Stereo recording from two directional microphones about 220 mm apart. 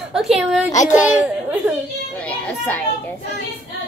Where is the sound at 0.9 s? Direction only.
5° right (ahead or behind).